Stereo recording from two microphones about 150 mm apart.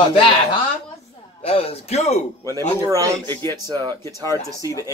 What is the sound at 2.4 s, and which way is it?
A man's voice, 25° right (ahead or behind).